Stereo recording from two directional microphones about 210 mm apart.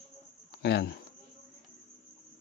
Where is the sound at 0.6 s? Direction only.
50° left (ahead or behind).